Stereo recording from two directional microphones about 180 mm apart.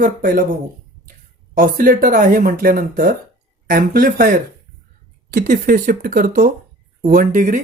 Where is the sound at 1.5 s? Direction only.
50° right (ahead or behind).